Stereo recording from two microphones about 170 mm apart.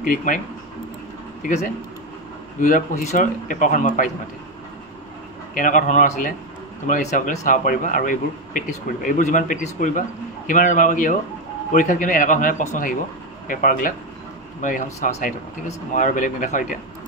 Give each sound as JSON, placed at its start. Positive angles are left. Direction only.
{"t": 0.0, "sound": "a man's voice", "side_deg": 50}
{"t": 2.6, "sound": "a man's voice", "side_deg": 50}
{"t": 5.5, "sound": "a man's voice", "side_deg": 50}